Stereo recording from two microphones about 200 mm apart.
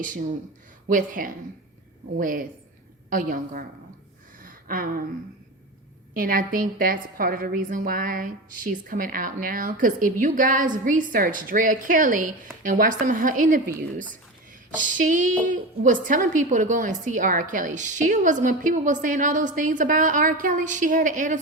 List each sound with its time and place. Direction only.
0.0 s a woman's voice: 40° right (ahead or behind)
4.4 s a sound: 45° right (ahead or behind)
6.1 s a woman's voice: 45° right (ahead or behind)
14.9 s a woman's voice: 40° right (ahead or behind)